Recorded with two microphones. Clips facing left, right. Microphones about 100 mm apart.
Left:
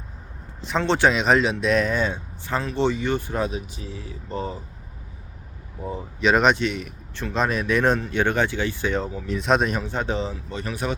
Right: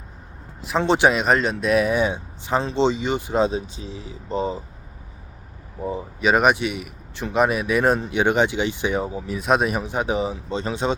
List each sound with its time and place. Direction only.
0.8 s speech: 15° right (ahead or behind)
1.1 s speech: centre (ahead or behind); by 4.6 s 20° right (ahead or behind)
5.8 s speech: 15° right (ahead or behind)